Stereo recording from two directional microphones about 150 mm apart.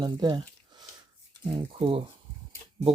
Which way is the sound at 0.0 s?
30° right (ahead or behind).